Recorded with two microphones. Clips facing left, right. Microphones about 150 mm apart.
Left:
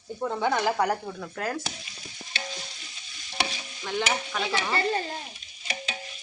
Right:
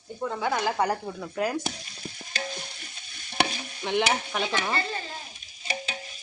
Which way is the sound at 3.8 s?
20° right (ahead or behind).